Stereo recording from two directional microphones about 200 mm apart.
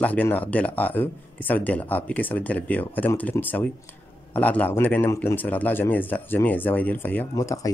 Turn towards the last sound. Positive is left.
turn(degrees=15)  # may be behind; listen again after turning